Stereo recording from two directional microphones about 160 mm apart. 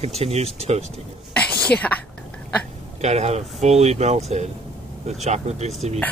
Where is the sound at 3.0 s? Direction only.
45° right (ahead or behind).